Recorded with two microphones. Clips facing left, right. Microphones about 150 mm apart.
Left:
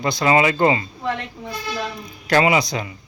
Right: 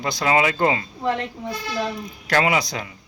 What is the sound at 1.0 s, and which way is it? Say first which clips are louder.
Speech: right 3 dB; 30° right (ahead or behind).